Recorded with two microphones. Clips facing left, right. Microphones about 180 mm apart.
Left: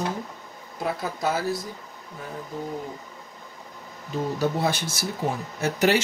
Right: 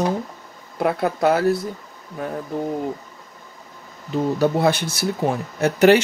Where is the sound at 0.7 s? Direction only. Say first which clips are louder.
Right 8 dB; 60° right (ahead or behind).